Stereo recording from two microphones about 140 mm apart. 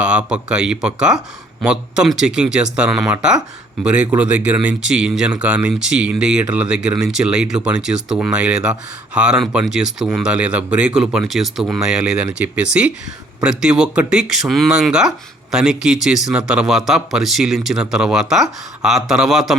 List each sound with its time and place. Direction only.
0.0 s speech: 10° right (ahead or behind)